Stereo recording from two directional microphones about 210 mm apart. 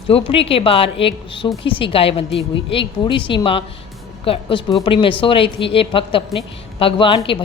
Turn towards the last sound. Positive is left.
turn(degrees=25)  # may be behind; listen again after turning